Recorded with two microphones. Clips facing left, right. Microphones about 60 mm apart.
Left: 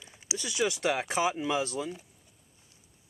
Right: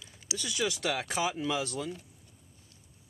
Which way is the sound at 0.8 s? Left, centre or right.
Centre.